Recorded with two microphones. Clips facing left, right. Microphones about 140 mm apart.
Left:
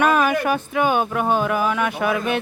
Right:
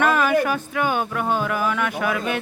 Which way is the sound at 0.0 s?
15° left (ahead or behind).